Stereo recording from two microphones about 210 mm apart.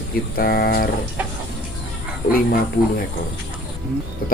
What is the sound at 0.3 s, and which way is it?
Speech, 45° left (ahead or behind).